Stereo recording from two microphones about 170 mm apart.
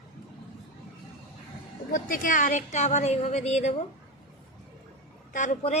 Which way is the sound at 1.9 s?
55° left (ahead or behind).